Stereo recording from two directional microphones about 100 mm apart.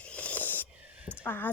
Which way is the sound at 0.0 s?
10° left (ahead or behind).